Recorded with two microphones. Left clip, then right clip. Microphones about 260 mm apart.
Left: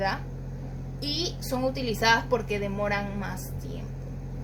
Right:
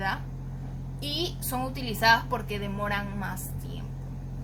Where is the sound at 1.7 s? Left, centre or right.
Centre.